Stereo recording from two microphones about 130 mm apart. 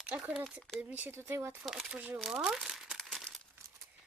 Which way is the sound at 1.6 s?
Centre (ahead or behind).